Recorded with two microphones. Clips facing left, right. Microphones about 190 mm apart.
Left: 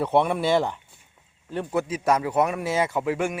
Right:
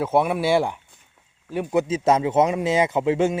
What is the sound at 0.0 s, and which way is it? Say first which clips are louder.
A man's voice: right 1 dB; 5° right (ahead or behind).